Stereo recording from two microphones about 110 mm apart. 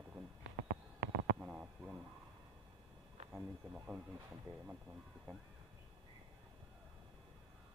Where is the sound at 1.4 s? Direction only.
10° right (ahead or behind).